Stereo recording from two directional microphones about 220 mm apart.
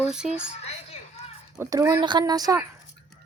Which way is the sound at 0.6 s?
30° left (ahead or behind).